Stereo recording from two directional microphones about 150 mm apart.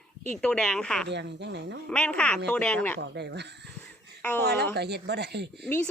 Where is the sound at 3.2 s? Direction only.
90° right.